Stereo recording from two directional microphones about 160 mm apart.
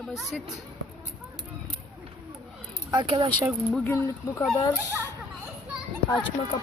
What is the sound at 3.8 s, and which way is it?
Speech, 15° left (ahead or behind).